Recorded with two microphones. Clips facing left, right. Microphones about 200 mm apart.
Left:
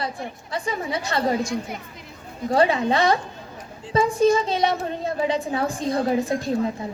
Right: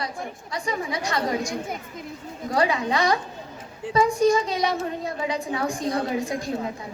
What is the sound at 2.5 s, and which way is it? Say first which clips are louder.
A woman's voice: left 4 dB; 30° left (ahead or behind).